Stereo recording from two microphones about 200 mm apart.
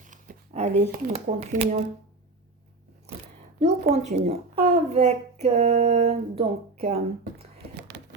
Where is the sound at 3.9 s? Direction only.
35° right (ahead or behind).